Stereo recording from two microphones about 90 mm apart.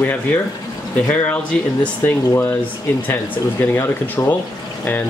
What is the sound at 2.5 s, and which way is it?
Speech, 25° left (ahead or behind).